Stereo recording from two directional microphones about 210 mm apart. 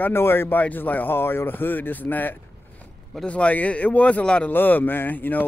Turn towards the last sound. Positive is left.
turn(degrees=10)  # may be behind; listen again after turning